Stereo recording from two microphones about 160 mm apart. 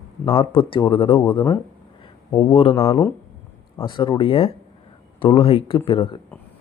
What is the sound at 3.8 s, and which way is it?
Speech, 30° left (ahead or behind).